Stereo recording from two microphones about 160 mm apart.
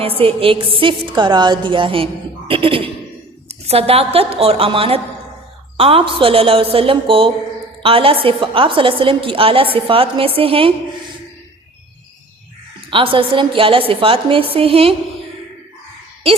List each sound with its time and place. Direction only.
0.2 s a woman's voice: 35° right (ahead or behind)
12.9 s a woman's voice: 35° right (ahead or behind)